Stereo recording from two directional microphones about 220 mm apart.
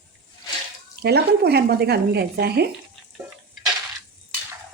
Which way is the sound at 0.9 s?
45° right (ahead or behind).